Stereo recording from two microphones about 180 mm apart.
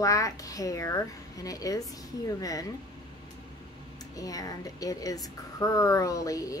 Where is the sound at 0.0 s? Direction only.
20° left (ahead or behind).